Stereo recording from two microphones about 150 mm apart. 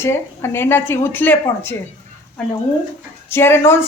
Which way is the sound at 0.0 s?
15° left (ahead or behind).